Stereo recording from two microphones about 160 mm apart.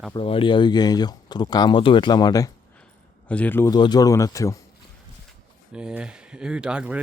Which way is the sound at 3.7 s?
25° left (ahead or behind).